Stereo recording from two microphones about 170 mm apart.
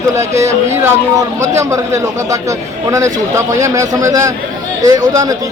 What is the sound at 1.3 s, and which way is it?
A man's voice, 15° right (ahead or behind).